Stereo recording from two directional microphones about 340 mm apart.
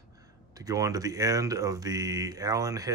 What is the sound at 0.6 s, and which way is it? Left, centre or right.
Speech, centre.